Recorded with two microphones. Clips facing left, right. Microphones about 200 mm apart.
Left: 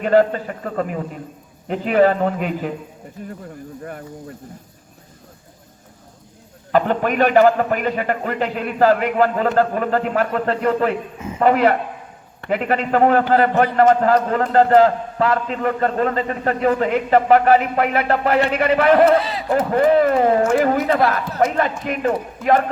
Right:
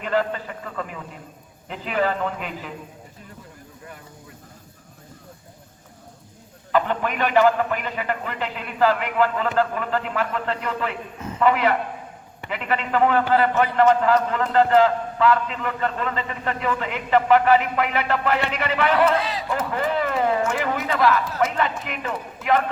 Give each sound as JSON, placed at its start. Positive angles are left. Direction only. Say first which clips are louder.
{"t": 0.0, "sound": "a man's voice", "louder": "left 8 dB", "side_deg": 45}
{"t": 6.7, "sound": "a man's voice", "louder": "left 5 dB", "side_deg": 45}